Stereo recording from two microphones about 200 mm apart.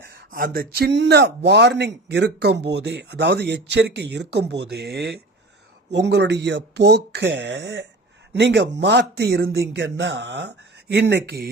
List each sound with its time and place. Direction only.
0.0 s speech: 50° right (ahead or behind)